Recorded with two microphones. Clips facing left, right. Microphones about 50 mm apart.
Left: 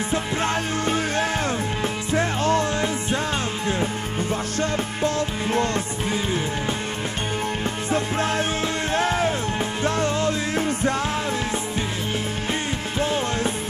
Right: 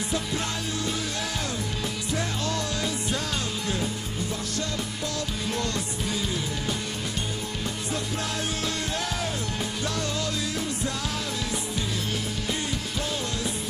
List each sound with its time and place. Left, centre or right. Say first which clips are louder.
0.1 s music: left 7 dB; left
7.9 s music: left 9 dB; left
13.0 s music: left 10 dB; left